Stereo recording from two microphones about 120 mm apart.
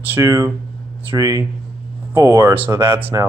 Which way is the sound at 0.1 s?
25° right (ahead or behind).